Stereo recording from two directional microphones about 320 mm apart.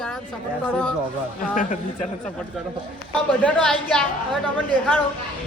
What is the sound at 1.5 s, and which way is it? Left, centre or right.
Speech, left.